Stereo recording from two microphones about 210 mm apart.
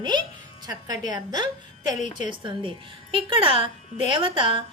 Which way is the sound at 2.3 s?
25° right (ahead or behind).